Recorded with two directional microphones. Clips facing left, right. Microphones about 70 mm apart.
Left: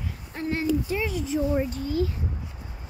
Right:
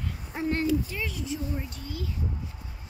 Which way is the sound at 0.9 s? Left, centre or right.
Left.